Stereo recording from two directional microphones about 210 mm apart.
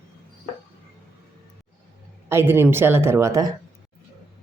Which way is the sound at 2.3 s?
10° right (ahead or behind).